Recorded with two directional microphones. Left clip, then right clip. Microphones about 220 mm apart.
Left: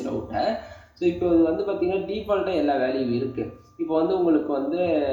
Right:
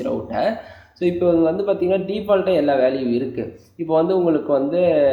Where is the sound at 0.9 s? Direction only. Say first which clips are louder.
Right 4 dB; 45° right (ahead or behind).